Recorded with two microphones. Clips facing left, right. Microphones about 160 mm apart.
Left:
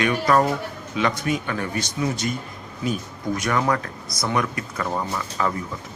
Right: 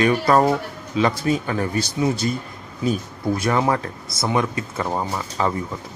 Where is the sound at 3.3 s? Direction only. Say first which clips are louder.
Right 2 dB; 30° right (ahead or behind).